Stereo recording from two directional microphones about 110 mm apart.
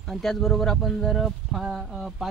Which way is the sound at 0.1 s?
Centre (ahead or behind).